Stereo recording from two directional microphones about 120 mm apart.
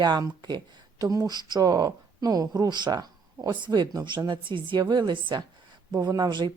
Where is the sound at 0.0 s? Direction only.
35° right (ahead or behind).